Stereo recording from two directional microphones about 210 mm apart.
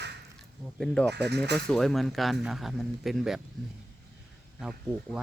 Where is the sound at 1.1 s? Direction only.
55° right (ahead or behind).